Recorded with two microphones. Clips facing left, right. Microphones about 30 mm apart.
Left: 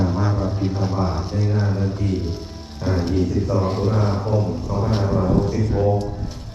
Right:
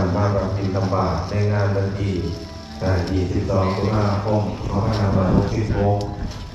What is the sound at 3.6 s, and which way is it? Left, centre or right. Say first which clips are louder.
Speech: right 3 dB; right.